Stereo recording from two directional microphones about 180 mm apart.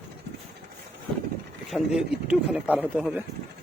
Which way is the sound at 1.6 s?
Centre (ahead or behind).